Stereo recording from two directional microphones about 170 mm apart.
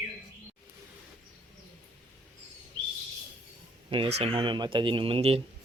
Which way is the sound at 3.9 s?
30° right (ahead or behind).